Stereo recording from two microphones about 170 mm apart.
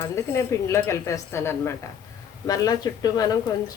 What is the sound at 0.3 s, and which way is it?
Speech, 15° left (ahead or behind).